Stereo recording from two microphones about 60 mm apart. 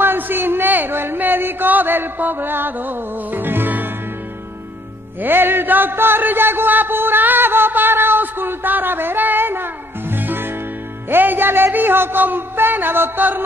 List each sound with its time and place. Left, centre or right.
0.0 s a man's voice: right
5.2 s a sound: right
11.1 s a man's voice: right